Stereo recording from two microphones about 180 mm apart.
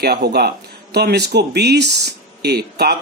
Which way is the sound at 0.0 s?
60° right (ahead or behind).